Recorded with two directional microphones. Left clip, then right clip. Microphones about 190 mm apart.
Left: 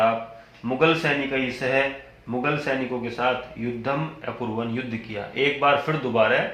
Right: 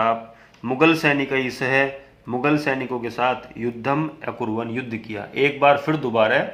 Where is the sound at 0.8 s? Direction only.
35° right (ahead or behind).